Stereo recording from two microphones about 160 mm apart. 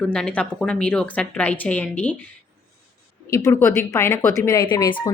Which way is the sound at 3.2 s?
20° left (ahead or behind).